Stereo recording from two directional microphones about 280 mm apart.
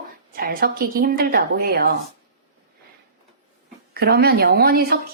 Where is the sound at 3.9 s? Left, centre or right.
Right.